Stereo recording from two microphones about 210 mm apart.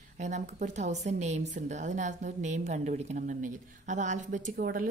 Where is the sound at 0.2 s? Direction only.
35° right (ahead or behind).